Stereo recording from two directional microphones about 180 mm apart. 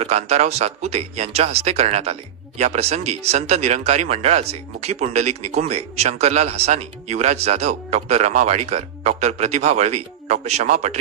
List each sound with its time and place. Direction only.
0.0 s speech: 35° right (ahead or behind)